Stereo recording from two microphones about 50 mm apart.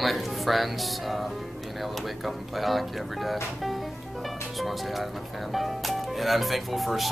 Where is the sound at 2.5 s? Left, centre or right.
Centre.